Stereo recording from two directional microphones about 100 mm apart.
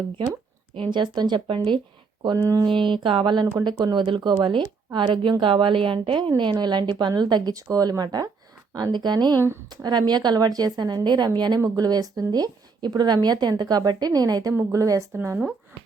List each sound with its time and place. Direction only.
0.8 s a woman's voice: 50° right (ahead or behind)
2.2 s a woman's voice: 40° right (ahead or behind)
2.6 s a woman's voice: 55° right (ahead or behind); by 15.4 s 25° right (ahead or behind)